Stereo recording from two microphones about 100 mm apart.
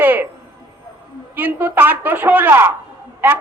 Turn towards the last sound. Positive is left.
turn(degrees=-20)  # may be behind; listen again after turning